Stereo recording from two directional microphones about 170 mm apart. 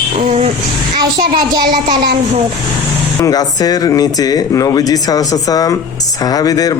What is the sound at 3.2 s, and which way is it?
Speech, 20° left (ahead or behind).